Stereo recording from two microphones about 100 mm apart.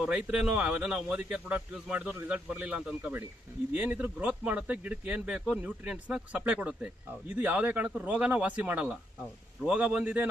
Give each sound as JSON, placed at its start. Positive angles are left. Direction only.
{"t": 0.0, "sound": "speech", "side_deg": -10}